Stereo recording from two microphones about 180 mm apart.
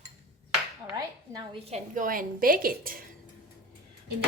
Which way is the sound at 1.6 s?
40° right (ahead or behind).